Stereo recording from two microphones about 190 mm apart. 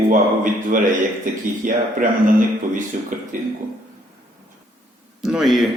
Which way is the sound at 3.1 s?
45° right (ahead or behind).